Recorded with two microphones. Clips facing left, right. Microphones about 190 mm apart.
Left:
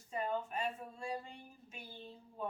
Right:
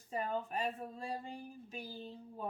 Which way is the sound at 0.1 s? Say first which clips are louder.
Even; 35° right (ahead or behind).